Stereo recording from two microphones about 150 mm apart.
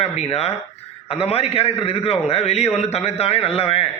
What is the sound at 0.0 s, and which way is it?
A man's voice, 45° left (ahead or behind).